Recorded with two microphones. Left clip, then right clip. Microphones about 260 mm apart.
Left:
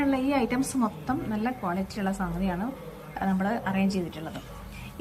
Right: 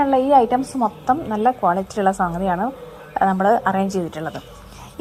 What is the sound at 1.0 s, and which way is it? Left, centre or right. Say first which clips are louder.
A woman's voice: right 13 dB; right.